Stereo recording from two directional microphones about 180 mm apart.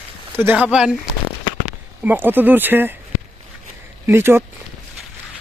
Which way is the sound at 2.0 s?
10° right (ahead or behind).